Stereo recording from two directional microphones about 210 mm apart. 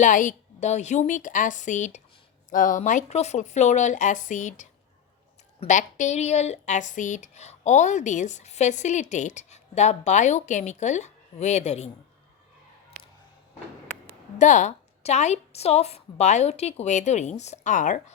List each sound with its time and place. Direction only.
0.0 s speech: 35° left (ahead or behind)
14.3 s speech: 35° left (ahead or behind)